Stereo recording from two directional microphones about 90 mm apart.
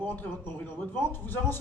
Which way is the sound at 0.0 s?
20° left (ahead or behind).